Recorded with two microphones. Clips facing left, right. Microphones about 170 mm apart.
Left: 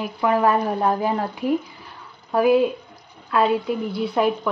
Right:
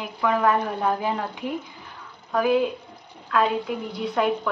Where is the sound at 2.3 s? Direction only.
25° left (ahead or behind).